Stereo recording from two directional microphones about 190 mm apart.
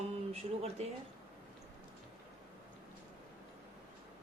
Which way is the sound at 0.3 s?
35° right (ahead or behind).